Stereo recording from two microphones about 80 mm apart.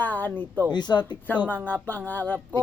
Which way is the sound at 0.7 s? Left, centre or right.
Left.